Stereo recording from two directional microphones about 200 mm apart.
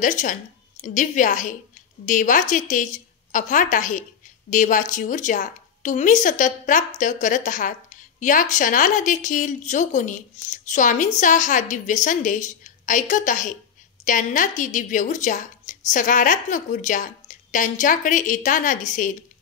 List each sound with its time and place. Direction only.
0.0 s a woman's voice: 40° left (ahead or behind)